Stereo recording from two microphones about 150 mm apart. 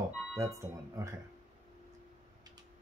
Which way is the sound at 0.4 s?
20° right (ahead or behind).